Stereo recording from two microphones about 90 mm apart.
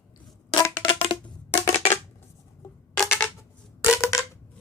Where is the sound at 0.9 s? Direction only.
90° left.